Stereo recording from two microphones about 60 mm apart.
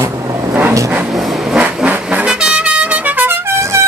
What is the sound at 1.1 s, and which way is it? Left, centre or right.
Vehicle, centre.